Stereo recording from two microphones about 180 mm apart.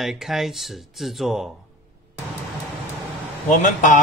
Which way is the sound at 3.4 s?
45° left (ahead or behind).